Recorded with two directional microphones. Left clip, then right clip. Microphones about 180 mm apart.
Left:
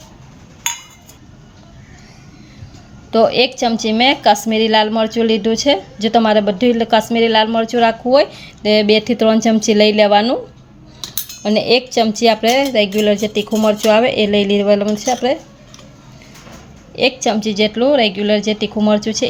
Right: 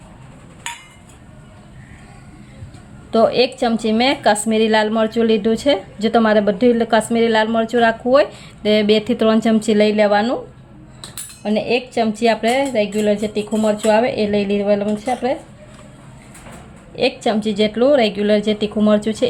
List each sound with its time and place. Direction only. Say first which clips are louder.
3.1 s a woman's voice: left 2 dB; 10° left (ahead or behind)
11.4 s a woman's voice: left 5 dB; 30° left (ahead or behind)
16.9 s a woman's voice: left 3 dB; 20° left (ahead or behind)